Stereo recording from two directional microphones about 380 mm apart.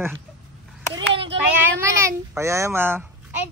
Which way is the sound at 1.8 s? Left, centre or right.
Centre.